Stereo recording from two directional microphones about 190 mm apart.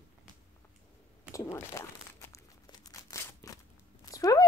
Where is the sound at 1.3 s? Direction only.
15° left (ahead or behind).